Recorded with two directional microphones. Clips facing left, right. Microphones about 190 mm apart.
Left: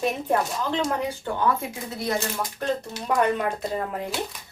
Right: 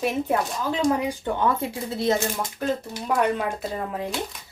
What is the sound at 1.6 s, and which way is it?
Speech, 25° right (ahead or behind).